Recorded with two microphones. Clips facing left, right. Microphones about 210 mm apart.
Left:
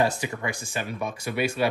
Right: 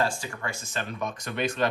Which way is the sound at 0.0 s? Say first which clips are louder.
Left 4 dB; 15° left (ahead or behind).